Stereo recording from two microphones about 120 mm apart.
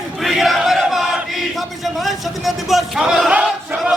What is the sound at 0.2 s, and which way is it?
Battle cry, centre (ahead or behind).